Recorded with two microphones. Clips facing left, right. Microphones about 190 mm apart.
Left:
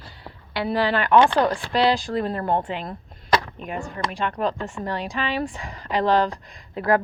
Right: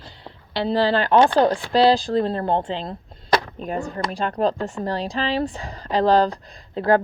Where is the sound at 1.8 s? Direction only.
35° right (ahead or behind).